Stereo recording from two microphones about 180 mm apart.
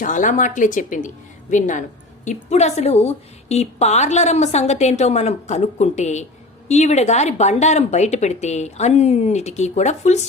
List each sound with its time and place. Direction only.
0.0 s a woman's voice: 45° left (ahead or behind)